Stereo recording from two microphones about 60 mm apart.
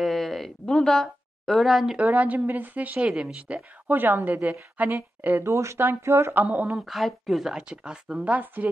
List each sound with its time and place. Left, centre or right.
0.0 s a sound: centre
0.7 s speech: centre
2.0 s a woman's voice: right
3.1 s a woman's voice: centre
3.9 s a woman's voice: right
5.4 s speech: right
6.3 s a woman's voice: right
6.8 s speech: centre